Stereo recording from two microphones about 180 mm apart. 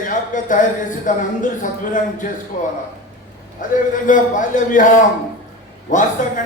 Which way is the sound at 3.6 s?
45° left (ahead or behind).